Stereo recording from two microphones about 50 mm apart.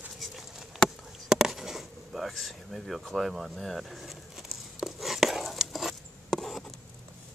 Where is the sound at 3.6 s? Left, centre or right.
Centre.